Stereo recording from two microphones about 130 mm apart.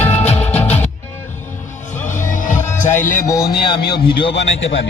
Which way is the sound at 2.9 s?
90° left.